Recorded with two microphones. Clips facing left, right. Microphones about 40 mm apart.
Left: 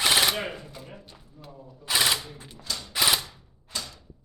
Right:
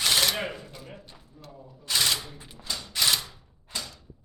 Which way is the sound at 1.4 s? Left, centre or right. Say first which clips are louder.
Left 2 dB; centre.